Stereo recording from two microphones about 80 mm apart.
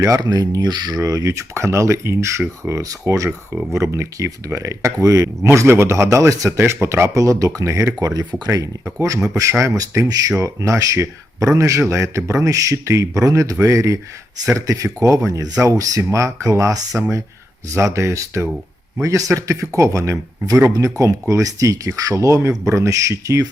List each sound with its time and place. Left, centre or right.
0.0 s speech: right
3.2 s speech: centre
3.8 s speech: right
9.0 s speech: right
16.9 s speech: right
17.7 s speech: right